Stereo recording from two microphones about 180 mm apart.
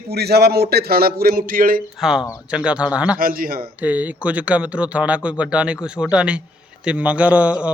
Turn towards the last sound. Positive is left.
turn(degrees=-5)  # may be behind; listen again after turning